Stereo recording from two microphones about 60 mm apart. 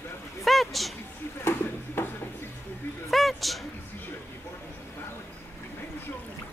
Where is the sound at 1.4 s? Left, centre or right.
Left.